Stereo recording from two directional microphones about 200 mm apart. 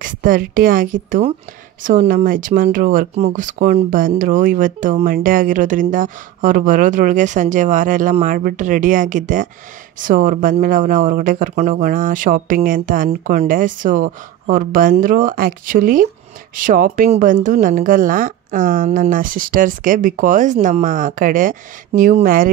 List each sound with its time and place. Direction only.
0.0 s a woman's voice: 45° right (ahead or behind)